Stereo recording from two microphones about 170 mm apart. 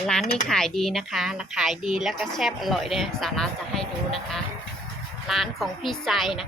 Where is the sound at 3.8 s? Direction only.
35° left (ahead or behind).